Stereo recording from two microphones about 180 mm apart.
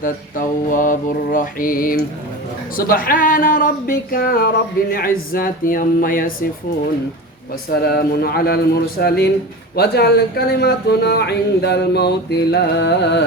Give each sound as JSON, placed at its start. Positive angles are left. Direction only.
{"t": 0.0, "sound": "speech", "side_deg": 50}
{"t": 7.7, "sound": "speech", "side_deg": 60}